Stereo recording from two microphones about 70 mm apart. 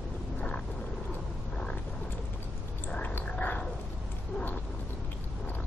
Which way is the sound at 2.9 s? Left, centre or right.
Left.